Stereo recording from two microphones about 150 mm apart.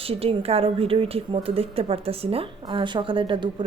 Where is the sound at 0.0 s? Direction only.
40° right (ahead or behind).